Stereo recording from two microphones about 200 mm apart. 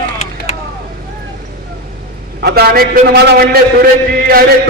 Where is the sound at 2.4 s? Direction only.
55° right (ahead or behind).